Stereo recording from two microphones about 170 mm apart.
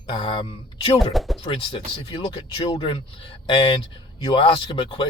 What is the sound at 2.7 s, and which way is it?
Speech, 30° left (ahead or behind).